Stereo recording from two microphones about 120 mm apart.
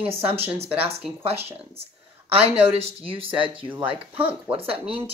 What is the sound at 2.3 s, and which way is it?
A woman's voice, 55° right (ahead or behind).